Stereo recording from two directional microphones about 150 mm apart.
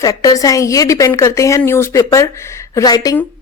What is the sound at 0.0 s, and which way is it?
Speech, 25° left (ahead or behind).